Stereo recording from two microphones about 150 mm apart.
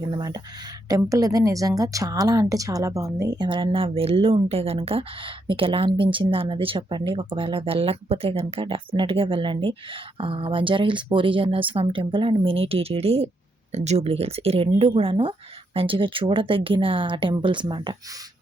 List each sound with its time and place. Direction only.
0.1 s a woman's voice: 25° right (ahead or behind)